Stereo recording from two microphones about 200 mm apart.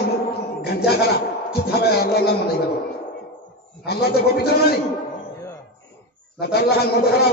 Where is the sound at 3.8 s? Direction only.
50° left (ahead or behind).